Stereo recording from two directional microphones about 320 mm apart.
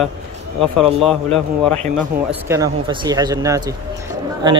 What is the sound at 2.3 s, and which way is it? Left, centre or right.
Speech, centre.